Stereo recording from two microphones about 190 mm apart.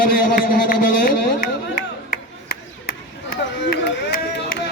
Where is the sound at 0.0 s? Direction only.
50° left (ahead or behind).